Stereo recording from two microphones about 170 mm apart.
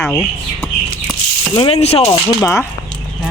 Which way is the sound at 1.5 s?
35° left (ahead or behind).